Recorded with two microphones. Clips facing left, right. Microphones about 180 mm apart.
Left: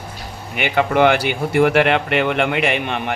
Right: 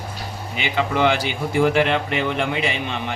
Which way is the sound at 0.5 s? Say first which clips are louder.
Left 5 dB; 60° left (ahead or behind).